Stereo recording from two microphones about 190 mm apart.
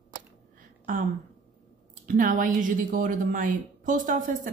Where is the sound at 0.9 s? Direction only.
45° right (ahead or behind).